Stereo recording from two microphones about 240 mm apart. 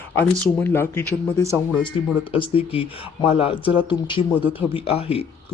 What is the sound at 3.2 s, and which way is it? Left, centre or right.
Speech, left.